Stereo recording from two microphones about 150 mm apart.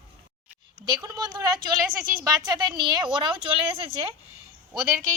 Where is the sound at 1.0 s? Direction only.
25° right (ahead or behind).